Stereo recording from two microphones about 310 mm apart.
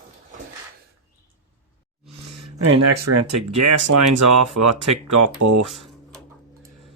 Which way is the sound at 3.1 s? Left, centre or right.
Right.